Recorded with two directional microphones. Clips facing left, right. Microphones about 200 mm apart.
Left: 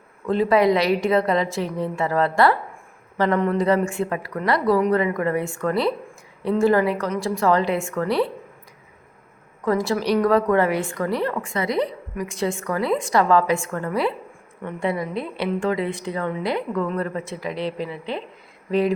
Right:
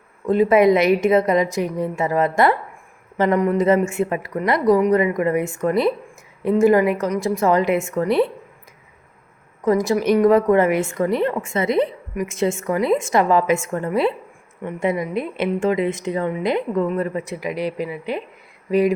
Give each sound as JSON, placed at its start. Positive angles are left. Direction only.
{"t": 0.3, "sound": "a woman's voice", "side_deg": -20}
{"t": 9.6, "sound": "a woman's voice", "side_deg": -20}